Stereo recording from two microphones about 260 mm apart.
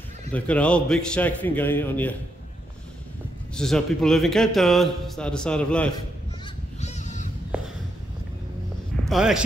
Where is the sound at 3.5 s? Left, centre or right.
Centre.